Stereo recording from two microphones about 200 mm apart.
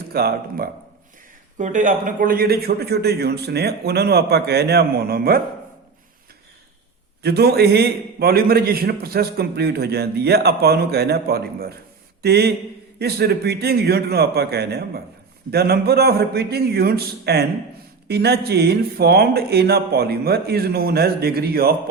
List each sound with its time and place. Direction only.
0.1 s a man's voice: 50° right (ahead or behind)
1.5 s a man's voice: 40° right (ahead or behind)
7.2 s a man's voice: 55° right (ahead or behind)